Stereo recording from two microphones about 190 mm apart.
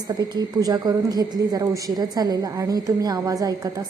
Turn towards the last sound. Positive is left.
turn(degrees=-20)  # may be behind; listen again after turning